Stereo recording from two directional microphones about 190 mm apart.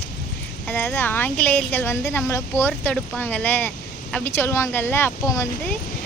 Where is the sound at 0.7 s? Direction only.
10° left (ahead or behind).